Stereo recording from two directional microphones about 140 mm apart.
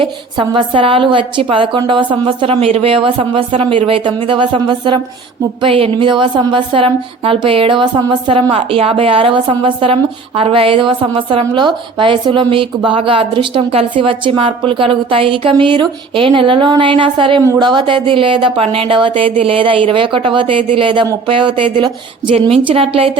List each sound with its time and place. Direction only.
0.0 s a woman's voice: 35° right (ahead or behind)